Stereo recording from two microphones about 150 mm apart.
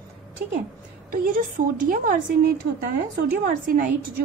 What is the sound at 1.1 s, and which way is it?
A woman's voice, 65° right (ahead or behind).